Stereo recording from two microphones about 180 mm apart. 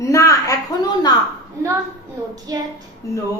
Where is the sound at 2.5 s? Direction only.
20° right (ahead or behind).